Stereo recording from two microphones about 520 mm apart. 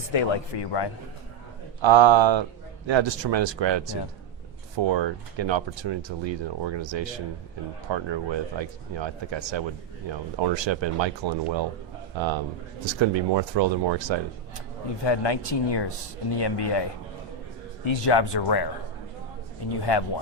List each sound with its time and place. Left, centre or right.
0.1 s speech: left
1.8 s a man's voice: right
15.0 s speech: left
17.8 s speech: left